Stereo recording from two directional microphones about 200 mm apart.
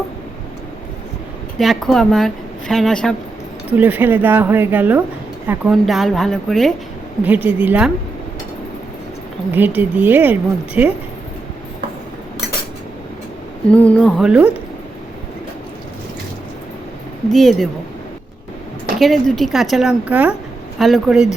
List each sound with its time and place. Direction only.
1.5 s a woman's voice: centre (ahead or behind)
3.7 s a woman's voice: 10° right (ahead or behind)
9.5 s speech: 10° right (ahead or behind)
13.7 s a woman's voice: 5° left (ahead or behind)
17.3 s a woman's voice: centre (ahead or behind)
18.9 s a woman's voice: centre (ahead or behind)